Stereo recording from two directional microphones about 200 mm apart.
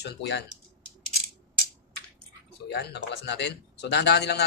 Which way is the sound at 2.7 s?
55° left (ahead or behind).